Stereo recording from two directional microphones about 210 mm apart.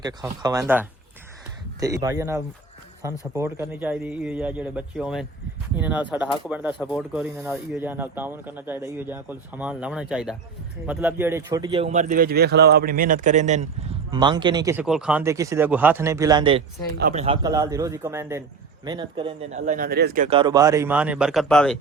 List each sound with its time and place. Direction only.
0.0 s speech: 20° right (ahead or behind); by 13.7 s 35° right (ahead or behind)
14.1 s speech: 20° right (ahead or behind)
14.8 s speech: 5° right (ahead or behind); by 20.2 s 45° right (ahead or behind)
20.2 s speech: 25° right (ahead or behind); by 21.8 s 5° left (ahead or behind)